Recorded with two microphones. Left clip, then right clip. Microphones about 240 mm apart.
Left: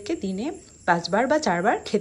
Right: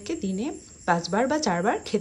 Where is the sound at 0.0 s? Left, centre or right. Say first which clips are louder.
Left 2 dB; centre.